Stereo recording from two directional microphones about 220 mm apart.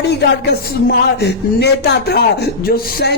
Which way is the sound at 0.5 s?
45° left (ahead or behind).